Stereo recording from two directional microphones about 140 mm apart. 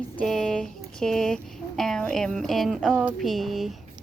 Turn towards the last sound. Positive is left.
turn(degrees=0)  # may be behind; listen again after turning